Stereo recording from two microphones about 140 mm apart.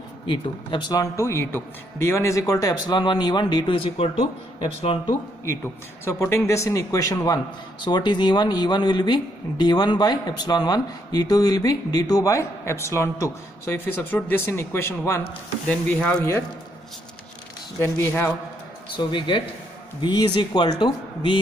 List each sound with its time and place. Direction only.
0.3 s speech: 35° left (ahead or behind)
6.0 s a man's voice: 15° left (ahead or behind)
15.6 s a man's voice: 5° left (ahead or behind)
17.7 s a man's voice: 20° left (ahead or behind)
18.9 s speech: 35° left (ahead or behind)